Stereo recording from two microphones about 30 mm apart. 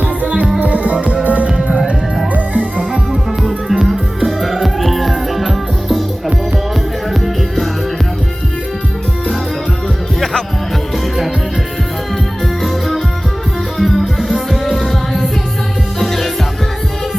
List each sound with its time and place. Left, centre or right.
0.6 s music: right
1.5 s music: right
3.1 s music: centre
13.7 s music: centre